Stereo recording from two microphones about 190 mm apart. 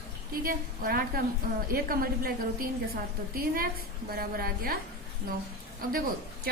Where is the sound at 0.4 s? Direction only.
50° right (ahead or behind).